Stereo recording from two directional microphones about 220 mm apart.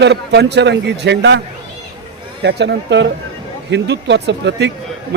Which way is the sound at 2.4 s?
50° right (ahead or behind).